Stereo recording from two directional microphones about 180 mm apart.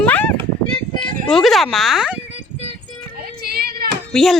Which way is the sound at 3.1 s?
55° right (ahead or behind).